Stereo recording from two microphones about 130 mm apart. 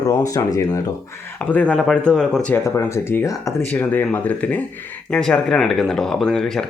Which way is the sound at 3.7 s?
15° left (ahead or behind).